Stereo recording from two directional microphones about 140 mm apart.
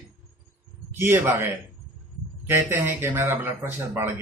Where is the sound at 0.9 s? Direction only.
15° right (ahead or behind).